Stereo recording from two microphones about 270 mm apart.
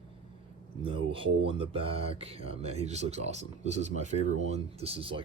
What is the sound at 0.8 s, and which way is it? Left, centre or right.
Speech, centre.